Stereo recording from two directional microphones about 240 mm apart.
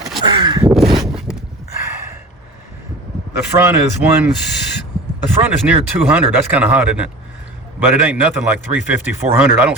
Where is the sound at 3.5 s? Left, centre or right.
Centre.